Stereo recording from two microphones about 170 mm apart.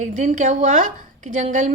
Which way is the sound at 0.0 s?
45° right (ahead or behind).